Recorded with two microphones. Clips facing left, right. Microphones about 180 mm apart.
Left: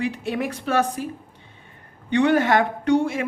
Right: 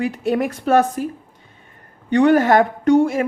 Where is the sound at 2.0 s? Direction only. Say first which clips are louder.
Right 5 dB; 40° right (ahead or behind).